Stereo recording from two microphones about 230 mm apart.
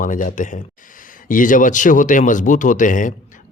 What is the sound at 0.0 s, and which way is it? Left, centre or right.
Speech, left.